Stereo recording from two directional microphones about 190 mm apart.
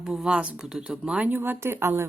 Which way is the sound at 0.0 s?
Centre (ahead or behind).